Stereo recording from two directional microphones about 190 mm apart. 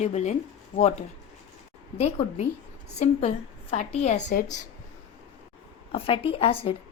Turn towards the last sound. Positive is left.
turn(degrees=30)  # may be behind; listen again after turning